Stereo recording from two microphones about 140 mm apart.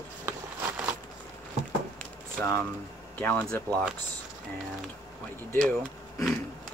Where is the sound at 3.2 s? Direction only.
10° left (ahead or behind).